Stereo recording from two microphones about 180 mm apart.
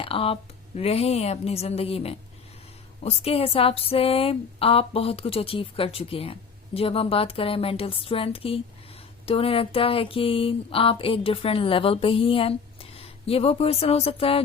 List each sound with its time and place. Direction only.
0.0 s speech: 30° left (ahead or behind)